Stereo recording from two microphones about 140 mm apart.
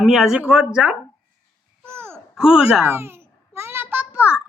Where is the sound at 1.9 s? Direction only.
15° right (ahead or behind).